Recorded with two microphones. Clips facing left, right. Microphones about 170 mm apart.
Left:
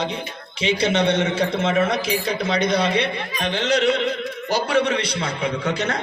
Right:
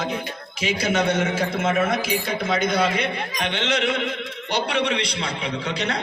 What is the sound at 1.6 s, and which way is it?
Speech, 50° right (ahead or behind).